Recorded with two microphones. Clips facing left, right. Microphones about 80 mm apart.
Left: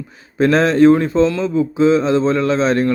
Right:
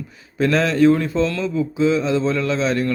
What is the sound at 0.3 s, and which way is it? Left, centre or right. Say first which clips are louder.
Speech: left 4 dB; left.